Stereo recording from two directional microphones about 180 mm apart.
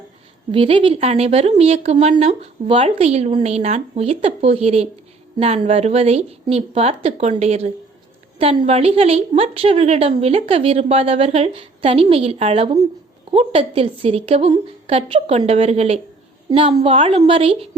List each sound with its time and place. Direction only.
0.5 s a woman's voice: 30° right (ahead or behind)